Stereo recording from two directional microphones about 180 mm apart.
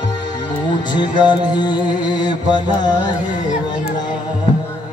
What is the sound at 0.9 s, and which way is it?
Music, 25° left (ahead or behind).